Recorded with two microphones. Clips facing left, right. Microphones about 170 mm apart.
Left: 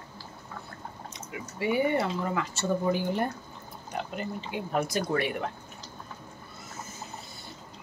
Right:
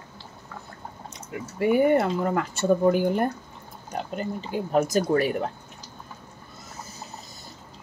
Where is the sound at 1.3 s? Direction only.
50° right (ahead or behind).